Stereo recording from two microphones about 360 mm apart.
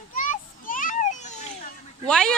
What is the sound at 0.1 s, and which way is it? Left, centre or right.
Children playing, left.